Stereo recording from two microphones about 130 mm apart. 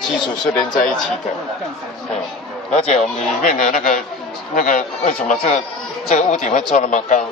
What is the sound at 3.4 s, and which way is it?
Speech, 85° left.